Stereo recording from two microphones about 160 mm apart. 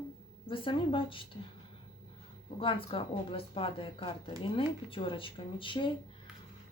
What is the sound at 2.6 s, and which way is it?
Speech, 35° left (ahead or behind).